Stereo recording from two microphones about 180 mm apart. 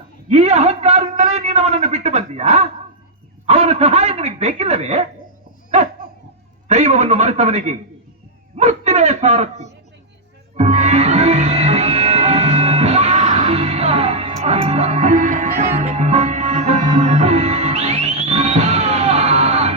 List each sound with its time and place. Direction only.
0.3 s a man's voice: 35° right (ahead or behind)
6.7 s a man's voice: 35° right (ahead or behind)
10.6 s music: 35° right (ahead or behind)